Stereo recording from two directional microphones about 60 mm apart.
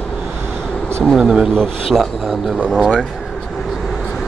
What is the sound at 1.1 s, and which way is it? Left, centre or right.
Speech, centre.